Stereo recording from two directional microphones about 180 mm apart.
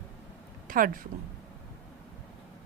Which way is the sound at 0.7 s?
50° right (ahead or behind).